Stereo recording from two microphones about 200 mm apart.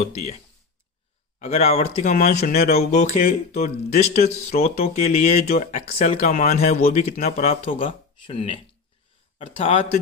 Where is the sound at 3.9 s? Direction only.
35° left (ahead or behind).